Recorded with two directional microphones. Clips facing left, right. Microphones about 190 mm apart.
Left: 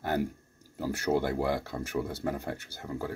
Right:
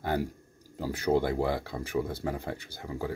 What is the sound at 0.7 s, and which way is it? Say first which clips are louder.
Speech: right 1 dB; 15° right (ahead or behind).